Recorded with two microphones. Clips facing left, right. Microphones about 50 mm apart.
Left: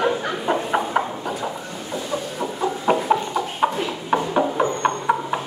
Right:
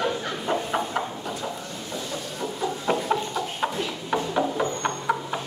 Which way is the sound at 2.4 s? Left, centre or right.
Centre.